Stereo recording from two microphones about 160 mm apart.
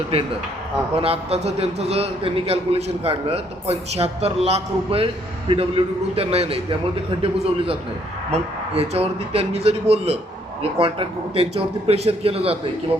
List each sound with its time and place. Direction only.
0.9 s a man's voice: 35° right (ahead or behind)
8.3 s a man's voice: 40° right (ahead or behind)